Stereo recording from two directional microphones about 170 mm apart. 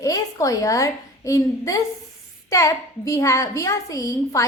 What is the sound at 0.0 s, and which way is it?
A child's voice, 20° left (ahead or behind).